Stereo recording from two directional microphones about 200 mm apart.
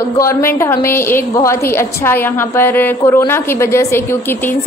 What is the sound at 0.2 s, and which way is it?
Speech, 10° left (ahead or behind).